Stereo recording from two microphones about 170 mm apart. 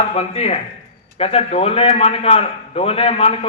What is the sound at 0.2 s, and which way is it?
A man's voice, 35° left (ahead or behind).